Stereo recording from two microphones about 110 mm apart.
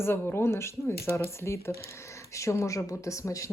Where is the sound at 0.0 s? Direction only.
20° left (ahead or behind).